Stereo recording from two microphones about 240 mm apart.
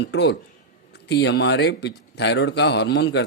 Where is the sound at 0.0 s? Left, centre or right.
Left.